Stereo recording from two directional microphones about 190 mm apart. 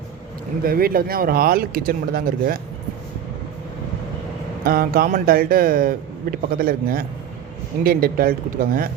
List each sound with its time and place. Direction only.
0.6 s speech: 50° right (ahead or behind)
4.6 s speech: 50° right (ahead or behind)